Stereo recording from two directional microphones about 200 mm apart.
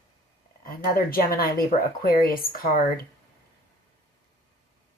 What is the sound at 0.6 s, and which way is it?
Speech, 45° left (ahead or behind).